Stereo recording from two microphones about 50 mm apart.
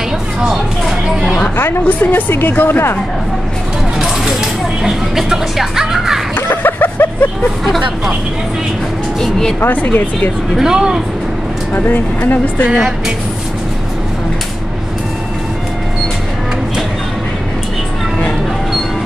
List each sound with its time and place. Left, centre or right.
0.5 s a sound: centre
1.9 s speech: left
4.0 s music: centre
6.5 s a sound: left
7.6 s speech: centre
9.2 s a woman's voice: centre
9.7 s speech: left
10.6 s speech: centre
11.7 s speech: left